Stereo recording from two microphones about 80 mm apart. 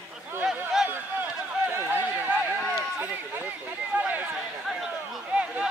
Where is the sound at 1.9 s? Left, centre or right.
Right.